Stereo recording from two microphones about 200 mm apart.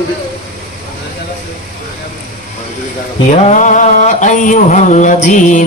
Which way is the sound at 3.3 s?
40° left (ahead or behind).